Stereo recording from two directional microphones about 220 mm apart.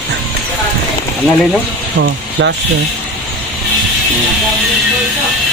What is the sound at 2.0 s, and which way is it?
Speech, 55° right (ahead or behind).